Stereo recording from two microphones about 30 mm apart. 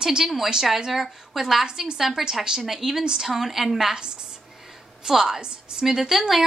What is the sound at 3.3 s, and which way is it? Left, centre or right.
Speech, centre.